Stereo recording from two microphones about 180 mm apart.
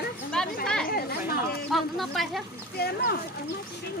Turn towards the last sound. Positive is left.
turn(degrees=60)  # may be behind; listen again after turning